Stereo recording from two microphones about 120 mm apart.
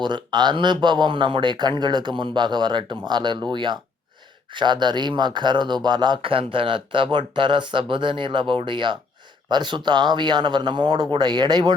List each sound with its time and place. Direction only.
0.0 s speech: 40° right (ahead or behind)